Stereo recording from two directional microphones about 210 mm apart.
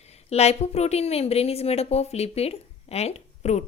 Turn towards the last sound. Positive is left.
turn(degrees=30)  # may be behind; listen again after turning